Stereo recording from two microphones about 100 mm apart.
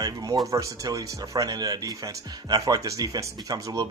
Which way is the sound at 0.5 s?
35° right (ahead or behind).